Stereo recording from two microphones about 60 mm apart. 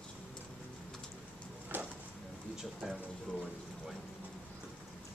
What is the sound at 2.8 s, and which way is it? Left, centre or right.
Speech, centre.